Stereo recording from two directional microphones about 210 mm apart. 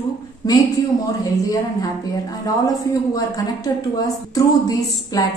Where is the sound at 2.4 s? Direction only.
15° left (ahead or behind).